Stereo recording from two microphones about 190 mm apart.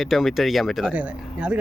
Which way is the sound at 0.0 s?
Centre (ahead or behind).